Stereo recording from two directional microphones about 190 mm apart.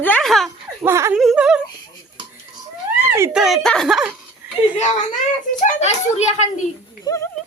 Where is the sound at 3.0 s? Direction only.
10° right (ahead or behind).